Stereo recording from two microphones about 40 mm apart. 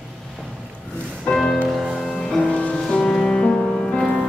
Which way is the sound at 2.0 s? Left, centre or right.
Centre.